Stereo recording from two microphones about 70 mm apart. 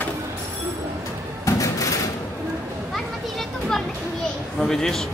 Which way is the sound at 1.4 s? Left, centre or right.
Left.